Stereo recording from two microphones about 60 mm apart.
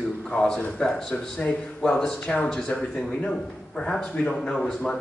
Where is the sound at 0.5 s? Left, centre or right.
Left.